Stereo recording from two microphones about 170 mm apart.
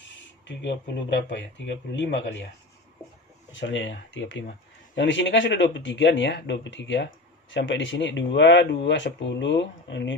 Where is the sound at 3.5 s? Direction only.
90° left.